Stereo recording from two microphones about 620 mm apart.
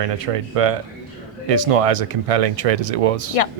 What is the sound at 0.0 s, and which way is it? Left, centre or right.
Speech, right.